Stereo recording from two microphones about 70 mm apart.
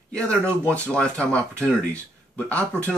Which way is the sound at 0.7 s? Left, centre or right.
Centre.